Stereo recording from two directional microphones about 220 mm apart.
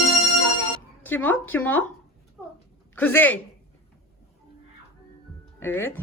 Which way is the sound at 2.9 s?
10° left (ahead or behind).